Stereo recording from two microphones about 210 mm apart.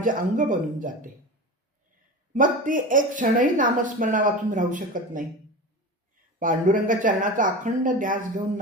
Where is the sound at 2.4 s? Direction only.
40° right (ahead or behind).